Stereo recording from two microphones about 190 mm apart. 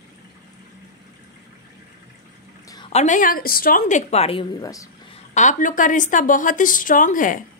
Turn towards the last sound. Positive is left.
turn(degrees=45)  # may be behind; listen again after turning